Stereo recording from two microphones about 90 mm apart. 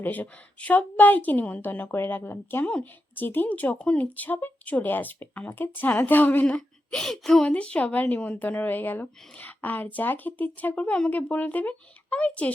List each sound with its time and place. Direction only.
0.0 s a child's voice: 20° left (ahead or behind)